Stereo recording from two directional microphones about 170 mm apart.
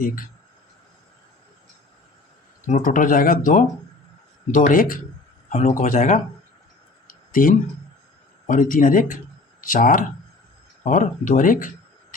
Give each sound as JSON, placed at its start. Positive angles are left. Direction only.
{"t": 2.6, "sound": "speech", "side_deg": 50}
{"t": 5.5, "sound": "speech", "side_deg": 40}
{"t": 7.1, "sound": "a sound", "side_deg": 55}
{"t": 8.4, "sound": "speech", "side_deg": 50}